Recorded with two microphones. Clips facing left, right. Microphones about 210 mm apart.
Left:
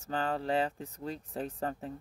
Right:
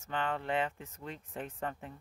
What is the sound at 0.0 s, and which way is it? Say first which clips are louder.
Speech: left 3 dB; 40° left (ahead or behind).